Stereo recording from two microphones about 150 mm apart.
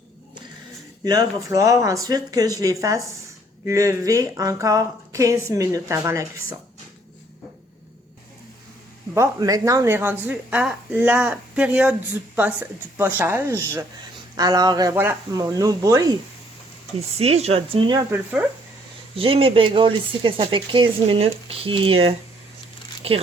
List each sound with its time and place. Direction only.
1.0 s speech: 25° right (ahead or behind)
9.1 s a woman's voice: 20° right (ahead or behind)
17.2 s speech: 45° right (ahead or behind)
18.1 s a woman's voice: 10° right (ahead or behind)
19.1 s speech: 35° right (ahead or behind)